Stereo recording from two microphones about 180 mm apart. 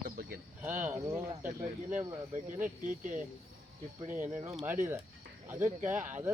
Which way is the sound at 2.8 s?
45° right (ahead or behind).